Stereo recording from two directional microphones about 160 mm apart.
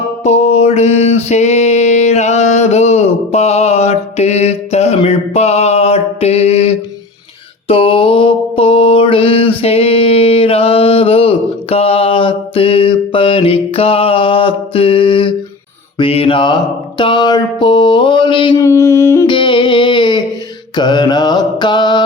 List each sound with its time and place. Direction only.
0.3 s a sound: 40° left (ahead or behind)
7.7 s mantra: 35° left (ahead or behind)
17.0 s a sound: 30° left (ahead or behind)
18.6 s music: 20° left (ahead or behind)
19.3 s music: 30° left (ahead or behind)
20.7 s mantra: 25° left (ahead or behind)